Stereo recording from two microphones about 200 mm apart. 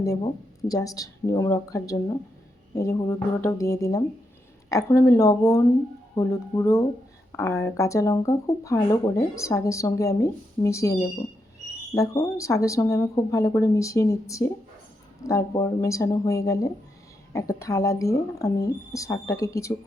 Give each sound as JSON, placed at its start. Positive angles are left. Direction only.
{"t": 0.0, "sound": "speech", "side_deg": 20}